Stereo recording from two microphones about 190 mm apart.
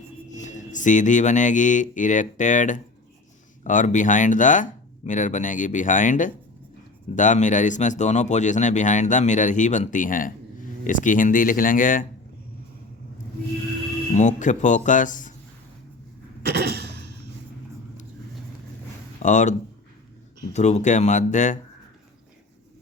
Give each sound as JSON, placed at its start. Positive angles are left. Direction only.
{"t": 0.3, "sound": "speech", "side_deg": 40}
{"t": 14.1, "sound": "speech", "side_deg": 40}
{"t": 16.4, "sound": "a sound", "side_deg": -55}
{"t": 19.2, "sound": "speech", "side_deg": 40}